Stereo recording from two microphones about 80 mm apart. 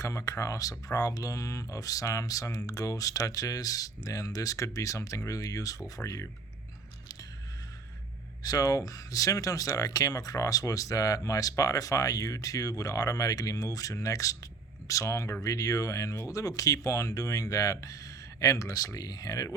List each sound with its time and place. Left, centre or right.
0.3 s speech: left
8.4 s speech: left